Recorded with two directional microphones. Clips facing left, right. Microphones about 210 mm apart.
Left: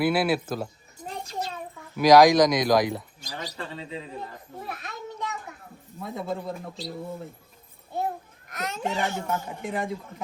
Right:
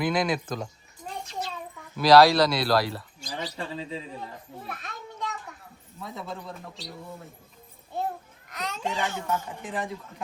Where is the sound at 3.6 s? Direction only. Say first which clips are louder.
Right 2 dB; 30° right (ahead or behind).